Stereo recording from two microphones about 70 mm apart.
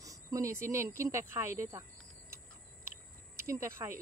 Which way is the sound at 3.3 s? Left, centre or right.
Right.